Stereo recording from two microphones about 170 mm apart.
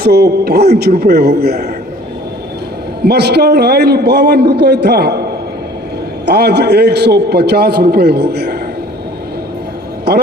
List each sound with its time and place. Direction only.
0.0 s a man's voice: 70° right (ahead or behind)
3.0 s a man's voice: 75° right (ahead or behind)
6.2 s a man's voice: 80° right